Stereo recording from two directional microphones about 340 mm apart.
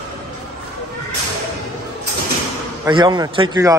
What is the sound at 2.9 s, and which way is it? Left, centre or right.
Speech, centre.